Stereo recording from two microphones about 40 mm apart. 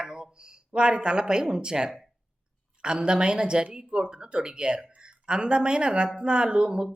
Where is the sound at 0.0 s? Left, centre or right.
Centre.